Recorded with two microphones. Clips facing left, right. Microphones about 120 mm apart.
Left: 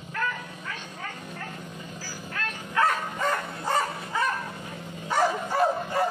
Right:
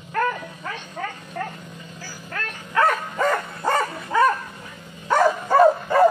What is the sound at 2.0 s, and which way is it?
Bow-wow, 60° right (ahead or behind).